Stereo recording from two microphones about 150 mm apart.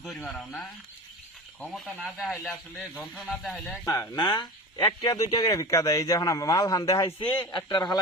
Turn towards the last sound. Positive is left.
turn(degrees=30)  # may be behind; listen again after turning